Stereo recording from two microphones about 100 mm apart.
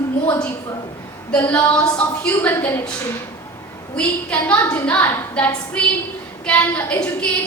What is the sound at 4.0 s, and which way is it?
A woman's voice, 15° left (ahead or behind).